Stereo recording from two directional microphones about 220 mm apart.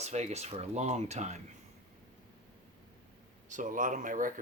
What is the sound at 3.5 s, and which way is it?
Speech, 35° right (ahead or behind).